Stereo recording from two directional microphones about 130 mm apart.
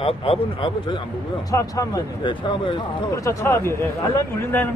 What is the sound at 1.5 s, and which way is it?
Speech, 25° left (ahead or behind).